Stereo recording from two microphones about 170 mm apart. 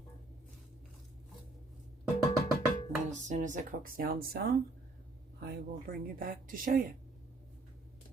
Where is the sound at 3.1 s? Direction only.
45° right (ahead or behind).